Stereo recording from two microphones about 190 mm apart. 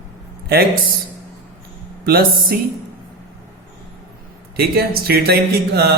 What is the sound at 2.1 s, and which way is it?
Mantra, 55° right (ahead or behind).